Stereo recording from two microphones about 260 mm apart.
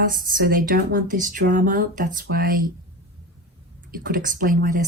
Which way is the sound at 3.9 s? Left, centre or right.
Right.